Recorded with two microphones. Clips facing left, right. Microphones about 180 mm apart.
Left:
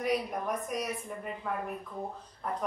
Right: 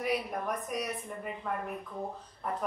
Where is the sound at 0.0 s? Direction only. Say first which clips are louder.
Left 1 dB; centre (ahead or behind).